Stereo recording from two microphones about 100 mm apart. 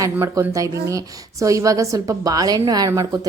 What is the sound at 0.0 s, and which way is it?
A woman's voice, 30° right (ahead or behind).